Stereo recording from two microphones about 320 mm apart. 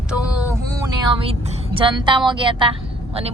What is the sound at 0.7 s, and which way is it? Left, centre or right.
Speech, centre.